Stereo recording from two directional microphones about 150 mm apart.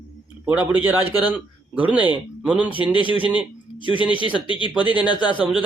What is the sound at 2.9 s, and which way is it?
Speech, 35° left (ahead or behind).